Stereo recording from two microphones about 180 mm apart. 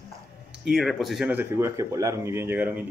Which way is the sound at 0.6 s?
Centre (ahead or behind).